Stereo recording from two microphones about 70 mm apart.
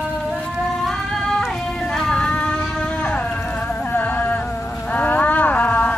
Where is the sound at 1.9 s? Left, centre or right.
Centre.